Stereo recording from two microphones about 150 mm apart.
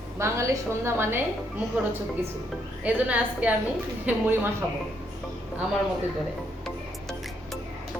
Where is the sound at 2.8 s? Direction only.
10° right (ahead or behind).